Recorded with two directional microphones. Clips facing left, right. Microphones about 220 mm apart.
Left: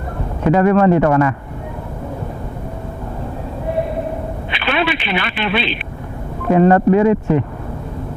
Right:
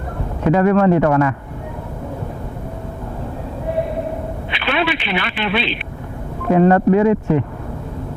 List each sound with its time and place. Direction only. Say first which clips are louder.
0.4 s a man's voice: left 1 dB; 15° left (ahead or behind)
4.5 s telephone: left 1 dB; 10° left (ahead or behind)
6.5 s speech: left 1 dB; 20° left (ahead or behind)